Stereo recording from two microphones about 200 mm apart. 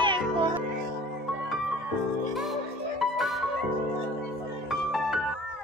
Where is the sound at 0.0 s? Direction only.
25° right (ahead or behind).